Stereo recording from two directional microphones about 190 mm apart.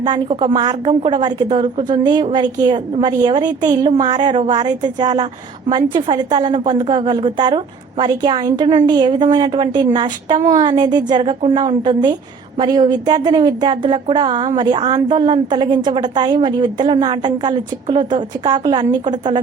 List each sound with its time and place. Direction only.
0.0 s speech: 25° right (ahead or behind)